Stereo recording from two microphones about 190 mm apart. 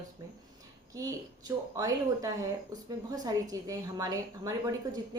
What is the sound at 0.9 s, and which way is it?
A woman's voice, 20° right (ahead or behind).